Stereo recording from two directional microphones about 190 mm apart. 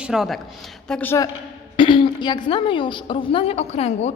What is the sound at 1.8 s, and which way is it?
A woman's voice, 25° left (ahead or behind).